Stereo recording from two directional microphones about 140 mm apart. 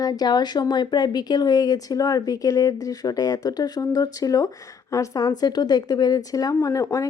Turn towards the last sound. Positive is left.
turn(degrees=25)  # may be behind; listen again after turning